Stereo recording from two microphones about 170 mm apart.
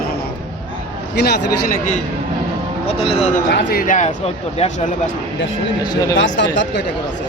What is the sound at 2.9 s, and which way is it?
Speech, 35° left (ahead or behind).